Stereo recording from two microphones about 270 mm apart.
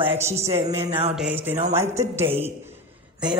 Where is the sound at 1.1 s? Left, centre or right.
Centre.